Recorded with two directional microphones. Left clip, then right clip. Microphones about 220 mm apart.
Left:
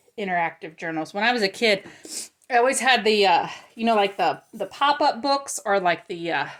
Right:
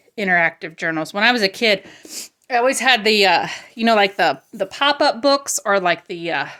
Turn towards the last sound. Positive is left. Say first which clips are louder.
# right 3 dB
turn(degrees=-20)  # may be behind; listen again after turning